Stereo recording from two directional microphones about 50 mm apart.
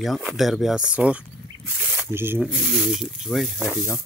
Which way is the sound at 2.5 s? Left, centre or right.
Centre.